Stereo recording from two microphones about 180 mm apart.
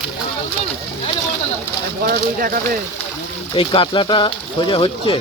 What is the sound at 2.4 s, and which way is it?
Speech, 55° right (ahead or behind).